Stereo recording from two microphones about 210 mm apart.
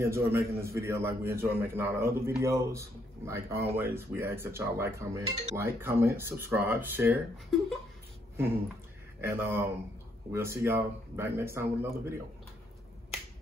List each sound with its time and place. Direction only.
0.0 s speech: 15° right (ahead or behind)
9.2 s speech: 10° right (ahead or behind)